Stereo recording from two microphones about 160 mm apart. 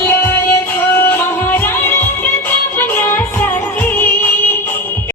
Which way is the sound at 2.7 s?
15° left (ahead or behind).